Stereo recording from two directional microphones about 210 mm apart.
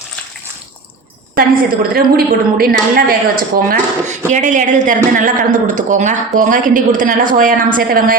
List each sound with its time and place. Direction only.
1.9 s a woman's voice: 45° right (ahead or behind)